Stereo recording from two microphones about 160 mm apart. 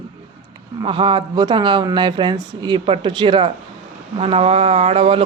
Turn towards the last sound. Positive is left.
turn(degrees=-40)  # may be behind; listen again after turning